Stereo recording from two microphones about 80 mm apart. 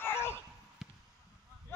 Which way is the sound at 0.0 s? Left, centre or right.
Left.